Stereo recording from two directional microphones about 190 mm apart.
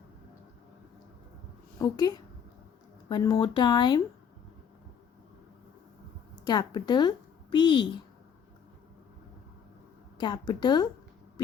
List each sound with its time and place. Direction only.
1.8 s speech: 20° left (ahead or behind)
6.4 s speech: 20° left (ahead or behind)
10.2 s speech: 25° left (ahead or behind)